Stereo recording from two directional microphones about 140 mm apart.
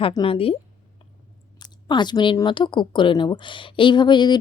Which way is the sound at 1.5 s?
30° left (ahead or behind).